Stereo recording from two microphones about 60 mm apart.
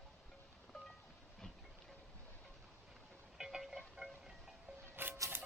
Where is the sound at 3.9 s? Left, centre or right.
Centre.